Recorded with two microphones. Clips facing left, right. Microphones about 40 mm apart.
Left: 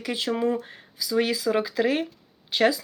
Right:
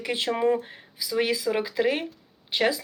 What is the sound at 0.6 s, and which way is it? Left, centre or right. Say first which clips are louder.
Speech: left 1 dB; centre.